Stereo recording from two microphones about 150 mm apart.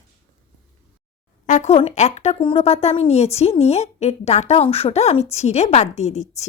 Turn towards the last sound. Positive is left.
turn(degrees=50)  # may be behind; listen again after turning